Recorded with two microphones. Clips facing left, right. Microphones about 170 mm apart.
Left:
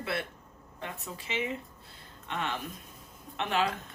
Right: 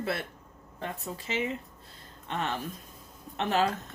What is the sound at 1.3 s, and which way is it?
Speech, 40° right (ahead or behind).